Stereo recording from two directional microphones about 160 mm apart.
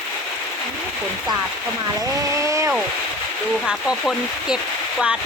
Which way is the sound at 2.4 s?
20° right (ahead or behind).